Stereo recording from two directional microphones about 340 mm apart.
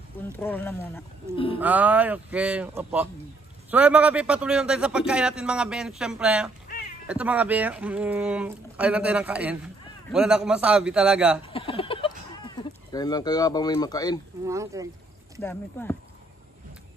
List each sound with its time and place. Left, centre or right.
0.4 s speech: centre
1.6 s speech: centre
11.4 s a sound: centre
14.4 s speech: centre
15.4 s speech: centre